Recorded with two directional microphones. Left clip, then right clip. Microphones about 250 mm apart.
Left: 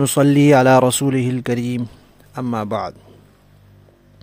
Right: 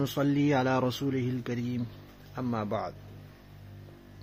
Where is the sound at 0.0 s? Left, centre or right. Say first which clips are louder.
Left 14 dB; left.